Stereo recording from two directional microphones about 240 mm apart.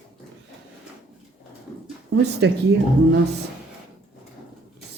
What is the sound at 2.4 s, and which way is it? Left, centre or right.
Speech, right.